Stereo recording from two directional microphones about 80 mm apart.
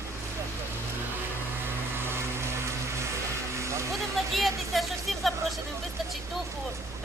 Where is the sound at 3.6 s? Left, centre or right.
Right.